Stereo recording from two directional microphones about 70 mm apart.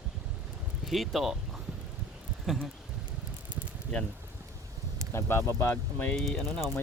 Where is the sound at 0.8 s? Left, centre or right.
Centre.